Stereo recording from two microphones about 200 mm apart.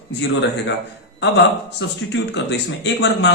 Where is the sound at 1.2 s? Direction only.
65° left (ahead or behind).